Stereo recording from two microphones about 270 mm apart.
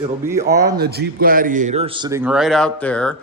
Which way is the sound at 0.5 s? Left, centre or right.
Right.